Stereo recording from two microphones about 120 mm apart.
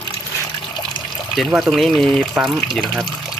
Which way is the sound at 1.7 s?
Centre (ahead or behind).